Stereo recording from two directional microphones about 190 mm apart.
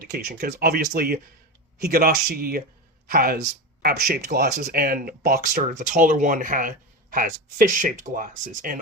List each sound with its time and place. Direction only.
0.1 s speech: 55° right (ahead or behind)